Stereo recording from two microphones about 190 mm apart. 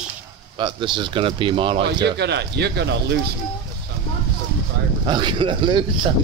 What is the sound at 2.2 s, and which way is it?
Speech, 60° right (ahead or behind).